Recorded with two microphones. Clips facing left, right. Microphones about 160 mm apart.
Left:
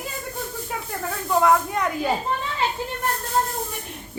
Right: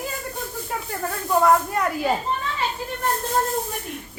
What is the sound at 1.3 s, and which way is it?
Speech, centre (ahead or behind).